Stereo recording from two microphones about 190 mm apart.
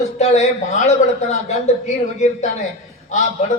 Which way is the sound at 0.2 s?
35° left (ahead or behind).